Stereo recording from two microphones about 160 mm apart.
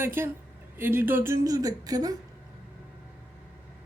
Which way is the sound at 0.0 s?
15° right (ahead or behind).